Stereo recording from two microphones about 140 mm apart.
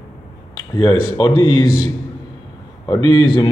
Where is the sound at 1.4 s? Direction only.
30° left (ahead or behind).